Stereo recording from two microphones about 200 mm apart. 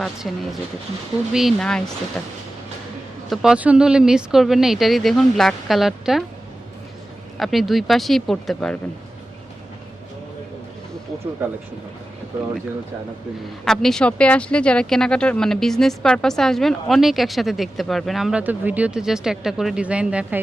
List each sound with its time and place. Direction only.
0.0 s speech: centre (ahead or behind)
7.3 s speech: centre (ahead or behind)
13.7 s speech: 5° left (ahead or behind)